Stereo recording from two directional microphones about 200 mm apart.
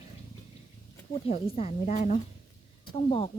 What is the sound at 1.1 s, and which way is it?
Speech, 30° left (ahead or behind).